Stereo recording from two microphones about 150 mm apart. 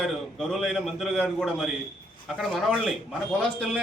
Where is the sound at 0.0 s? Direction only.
Centre (ahead or behind).